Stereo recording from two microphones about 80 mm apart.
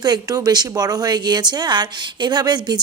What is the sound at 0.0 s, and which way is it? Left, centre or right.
Speech, right.